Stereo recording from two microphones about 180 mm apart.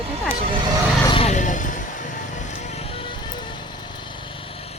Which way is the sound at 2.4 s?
40° left (ahead or behind).